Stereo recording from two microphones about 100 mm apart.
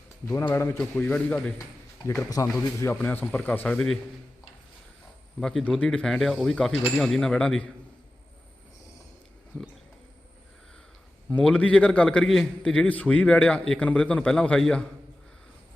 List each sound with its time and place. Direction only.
0.5 s speech: 30° left (ahead or behind)
0.9 s a man's voice: 15° left (ahead or behind)
2.0 s speech: 30° left (ahead or behind)
5.4 s a man's voice: 5° left (ahead or behind)
9.5 s a sound: 30° left (ahead or behind)
11.3 s a man's voice: 10° left (ahead or behind)